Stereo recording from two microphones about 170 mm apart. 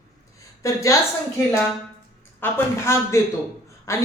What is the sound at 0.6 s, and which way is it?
Speech, 20° left (ahead or behind).